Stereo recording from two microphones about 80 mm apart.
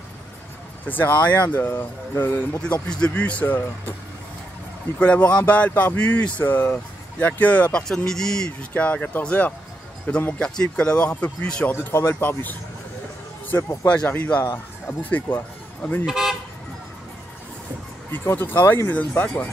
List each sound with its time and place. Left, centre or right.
0.8 s speech: left
2.6 s speech: centre
4.9 s speech: centre
7.9 s speech: centre
11.7 s speech: left
13.8 s speech: centre
16.1 s speech: centre
18.1 s speech: left